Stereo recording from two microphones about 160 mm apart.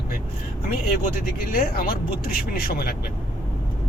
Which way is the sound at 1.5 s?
70° left (ahead or behind).